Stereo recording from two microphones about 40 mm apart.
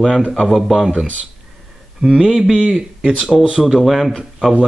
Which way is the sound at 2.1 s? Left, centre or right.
Centre.